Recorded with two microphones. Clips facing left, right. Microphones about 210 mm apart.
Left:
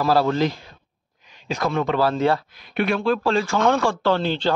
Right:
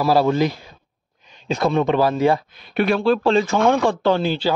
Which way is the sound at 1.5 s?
20° right (ahead or behind).